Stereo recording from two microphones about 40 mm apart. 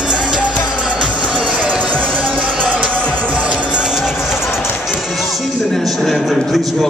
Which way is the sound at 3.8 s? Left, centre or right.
Centre.